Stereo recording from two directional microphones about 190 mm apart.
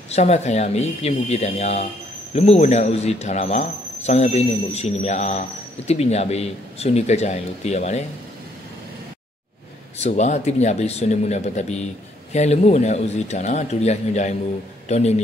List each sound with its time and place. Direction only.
0.1 s speech: 35° left (ahead or behind)
9.9 s speech: 35° left (ahead or behind)